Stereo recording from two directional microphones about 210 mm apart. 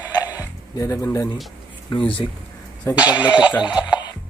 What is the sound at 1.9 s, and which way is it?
Speech, 25° left (ahead or behind).